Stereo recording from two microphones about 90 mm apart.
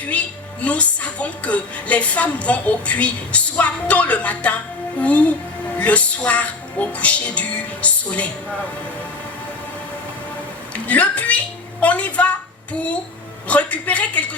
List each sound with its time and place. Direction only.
0.0 s a woman's voice: 15° left (ahead or behind)
10.8 s a woman's voice: 15° left (ahead or behind)
13.5 s a woman's voice: 15° left (ahead or behind)